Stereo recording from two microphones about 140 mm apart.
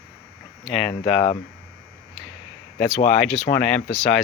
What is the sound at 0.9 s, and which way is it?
Speech, 40° left (ahead or behind).